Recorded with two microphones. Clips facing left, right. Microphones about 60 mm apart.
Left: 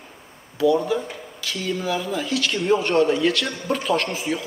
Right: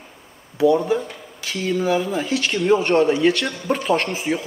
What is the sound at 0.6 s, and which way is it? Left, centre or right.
Speech, right.